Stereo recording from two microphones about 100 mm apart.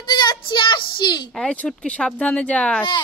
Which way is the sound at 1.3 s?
10° left (ahead or behind).